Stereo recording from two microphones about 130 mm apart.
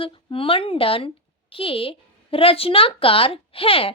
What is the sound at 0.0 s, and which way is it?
A woman's voice, 45° left (ahead or behind).